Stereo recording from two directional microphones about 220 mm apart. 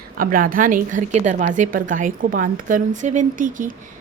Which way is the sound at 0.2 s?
40° right (ahead or behind).